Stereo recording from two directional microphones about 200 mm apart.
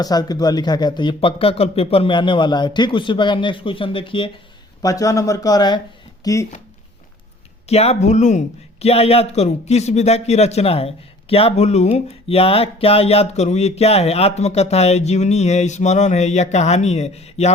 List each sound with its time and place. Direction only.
0.0 s speech: 20° left (ahead or behind)
7.7 s a man's voice: 30° left (ahead or behind)